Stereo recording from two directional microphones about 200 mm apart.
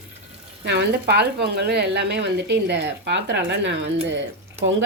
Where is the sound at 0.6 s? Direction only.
55° right (ahead or behind).